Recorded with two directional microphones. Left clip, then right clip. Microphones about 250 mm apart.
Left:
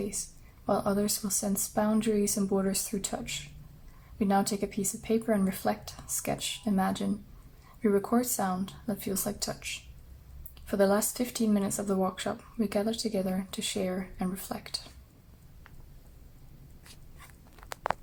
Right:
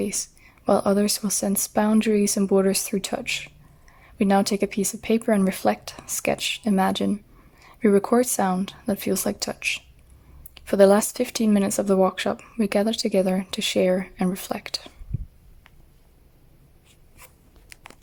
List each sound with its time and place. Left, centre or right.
0.0 s speech: right